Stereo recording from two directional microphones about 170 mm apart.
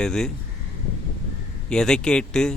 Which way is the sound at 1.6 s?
5° left (ahead or behind).